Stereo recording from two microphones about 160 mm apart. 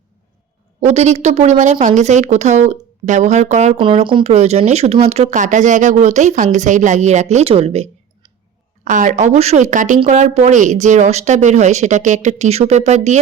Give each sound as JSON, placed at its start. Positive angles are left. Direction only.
{"t": 0.8, "sound": "speech", "side_deg": -45}
{"t": 3.8, "sound": "speech", "side_deg": -30}
{"t": 8.8, "sound": "speech", "side_deg": -50}